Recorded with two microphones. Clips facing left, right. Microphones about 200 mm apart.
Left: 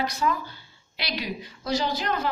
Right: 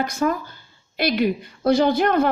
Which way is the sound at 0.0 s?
50° right (ahead or behind).